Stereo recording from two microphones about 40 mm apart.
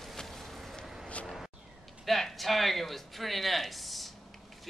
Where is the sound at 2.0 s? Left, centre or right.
Centre.